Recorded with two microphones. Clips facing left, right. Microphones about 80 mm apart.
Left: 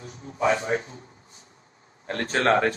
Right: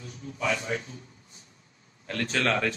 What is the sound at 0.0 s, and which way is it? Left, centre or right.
A man's voice, left.